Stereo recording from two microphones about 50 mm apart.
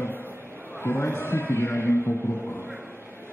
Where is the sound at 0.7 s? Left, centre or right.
Left.